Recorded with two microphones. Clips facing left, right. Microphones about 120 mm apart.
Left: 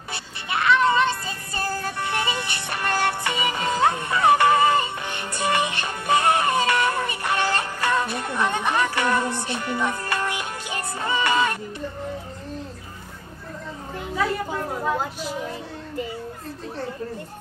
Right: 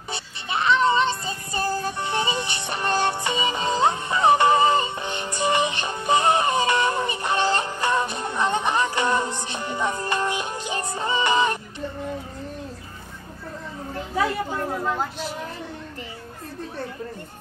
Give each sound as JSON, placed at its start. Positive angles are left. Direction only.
{"t": 0.1, "sound": "music", "side_deg": -25}